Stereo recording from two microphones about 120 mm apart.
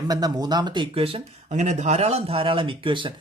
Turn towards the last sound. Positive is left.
turn(degrees=-45)  # may be behind; listen again after turning